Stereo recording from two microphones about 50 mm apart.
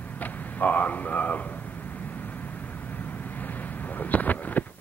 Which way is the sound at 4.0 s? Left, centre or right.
Left.